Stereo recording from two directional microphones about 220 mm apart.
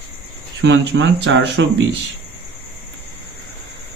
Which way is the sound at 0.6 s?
55° right (ahead or behind).